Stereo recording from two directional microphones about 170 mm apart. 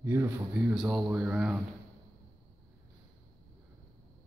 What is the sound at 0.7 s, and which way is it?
Speech, centre (ahead or behind).